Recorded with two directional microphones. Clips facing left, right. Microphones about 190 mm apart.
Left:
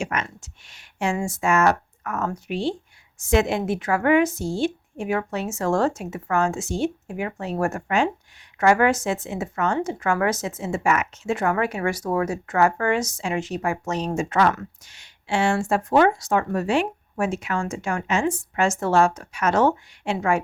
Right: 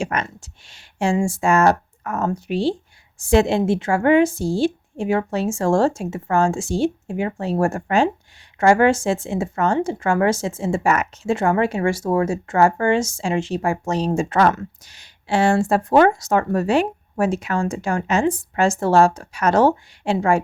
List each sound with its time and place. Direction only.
0.0 s speech: 35° right (ahead or behind)